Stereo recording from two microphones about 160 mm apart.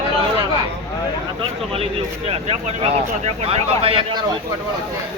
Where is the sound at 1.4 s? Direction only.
35° right (ahead or behind).